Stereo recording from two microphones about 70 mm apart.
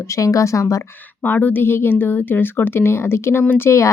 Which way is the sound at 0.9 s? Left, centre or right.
Left.